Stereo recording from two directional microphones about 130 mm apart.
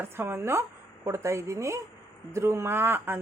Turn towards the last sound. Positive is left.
turn(degrees=-15)  # may be behind; listen again after turning